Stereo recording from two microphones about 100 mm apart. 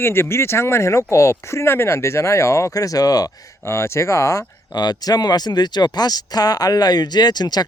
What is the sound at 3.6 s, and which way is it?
Speech, 25° left (ahead or behind).